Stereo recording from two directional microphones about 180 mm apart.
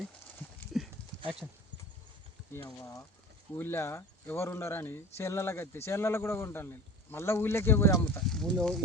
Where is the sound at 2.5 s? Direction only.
15° left (ahead or behind).